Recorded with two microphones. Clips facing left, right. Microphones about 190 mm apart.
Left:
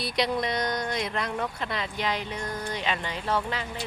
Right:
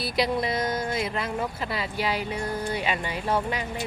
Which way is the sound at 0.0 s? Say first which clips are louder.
Right 2 dB; centre (ahead or behind).